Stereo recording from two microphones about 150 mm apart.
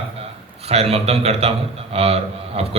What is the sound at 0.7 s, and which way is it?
A man's voice, 45° right (ahead or behind).